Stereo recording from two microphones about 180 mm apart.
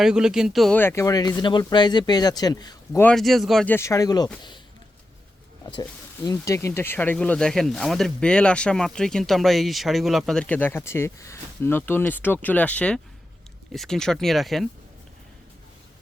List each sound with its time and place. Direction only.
0.0 s speech: 5° right (ahead or behind)
0.8 s speech: 15° left (ahead or behind)
3.0 s speech: 5° left (ahead or behind)
3.8 s speech: 15° left (ahead or behind)
5.7 s speech: 25° left (ahead or behind); by 14.7 s centre (ahead or behind)